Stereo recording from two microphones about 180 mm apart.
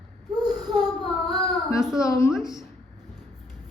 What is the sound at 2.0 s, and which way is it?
Speech, 15° left (ahead or behind).